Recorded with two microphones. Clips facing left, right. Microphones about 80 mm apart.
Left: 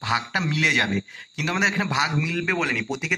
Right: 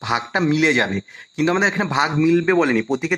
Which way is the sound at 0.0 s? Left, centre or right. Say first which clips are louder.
Right 5 dB; right.